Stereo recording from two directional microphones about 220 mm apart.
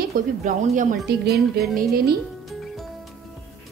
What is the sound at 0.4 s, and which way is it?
Speech, 35° right (ahead or behind).